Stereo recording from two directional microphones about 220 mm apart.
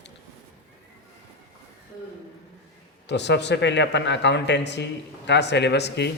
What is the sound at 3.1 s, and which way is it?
A man's voice, 50° left (ahead or behind).